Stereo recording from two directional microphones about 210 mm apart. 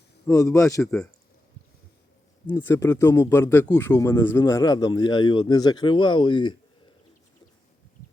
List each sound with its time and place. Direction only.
0.3 s speech: 15° left (ahead or behind)
0.8 s speech: 5° left (ahead or behind)
2.5 s speech: 10° left (ahead or behind)